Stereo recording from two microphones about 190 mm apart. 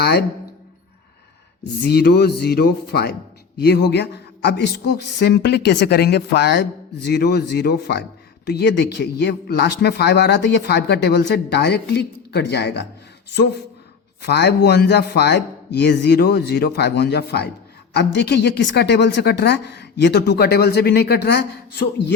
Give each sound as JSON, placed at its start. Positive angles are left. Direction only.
{"t": 0.0, "sound": "speech", "side_deg": 60}
{"t": 1.6, "sound": "speech", "side_deg": 60}
{"t": 14.2, "sound": "speech", "side_deg": 60}